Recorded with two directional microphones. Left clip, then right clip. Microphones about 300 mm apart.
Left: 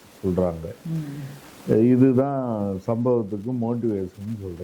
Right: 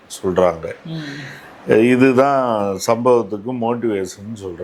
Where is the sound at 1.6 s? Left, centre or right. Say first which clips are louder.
Right 6 dB; centre.